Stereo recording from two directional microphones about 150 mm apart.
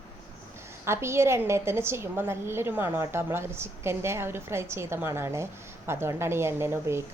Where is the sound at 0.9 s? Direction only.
15° right (ahead or behind).